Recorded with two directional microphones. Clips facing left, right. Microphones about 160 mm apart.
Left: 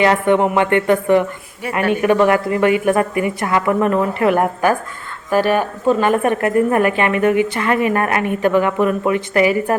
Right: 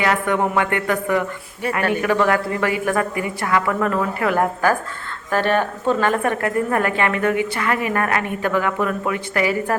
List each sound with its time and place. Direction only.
0.0 s a woman's voice: 25° left (ahead or behind)